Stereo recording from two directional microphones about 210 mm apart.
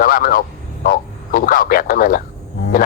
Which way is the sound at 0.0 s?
40° left (ahead or behind).